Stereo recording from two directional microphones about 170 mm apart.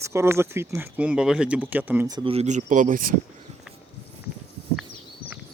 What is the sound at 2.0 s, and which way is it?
Speech, 25° right (ahead or behind).